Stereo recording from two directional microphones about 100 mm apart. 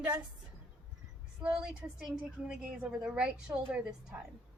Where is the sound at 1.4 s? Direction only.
10° right (ahead or behind).